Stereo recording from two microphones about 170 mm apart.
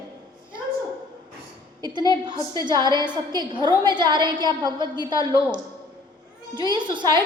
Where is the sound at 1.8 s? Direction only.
25° right (ahead or behind).